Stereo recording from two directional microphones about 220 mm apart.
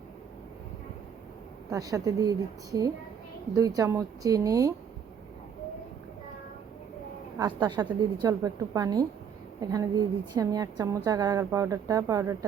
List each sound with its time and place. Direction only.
1.7 s a woman's voice: 15° right (ahead or behind)
7.3 s a woman's voice: 20° right (ahead or behind)